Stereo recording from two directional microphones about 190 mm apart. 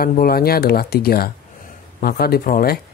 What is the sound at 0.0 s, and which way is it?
Speech, 50° left (ahead or behind).